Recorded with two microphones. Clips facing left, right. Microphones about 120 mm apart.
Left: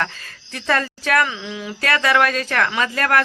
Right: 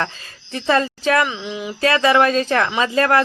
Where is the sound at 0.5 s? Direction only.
25° right (ahead or behind).